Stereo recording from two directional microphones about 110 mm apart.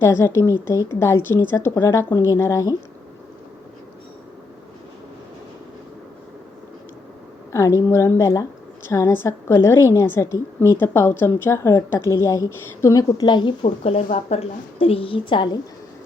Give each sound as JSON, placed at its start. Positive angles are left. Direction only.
{"t": 0.0, "sound": "a woman's voice", "side_deg": 25}
{"t": 7.8, "sound": "a woman's voice", "side_deg": 25}
{"t": 13.8, "sound": "a woman's voice", "side_deg": 65}